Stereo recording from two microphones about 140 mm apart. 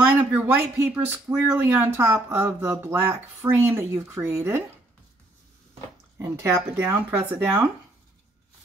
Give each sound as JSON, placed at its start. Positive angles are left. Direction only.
{"t": 0.0, "sound": "speech", "side_deg": -15}
{"t": 6.1, "sound": "speech", "side_deg": -15}